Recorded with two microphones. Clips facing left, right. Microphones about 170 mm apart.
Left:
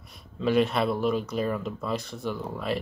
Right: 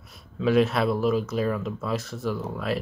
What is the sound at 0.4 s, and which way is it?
Speech, centre (ahead or behind).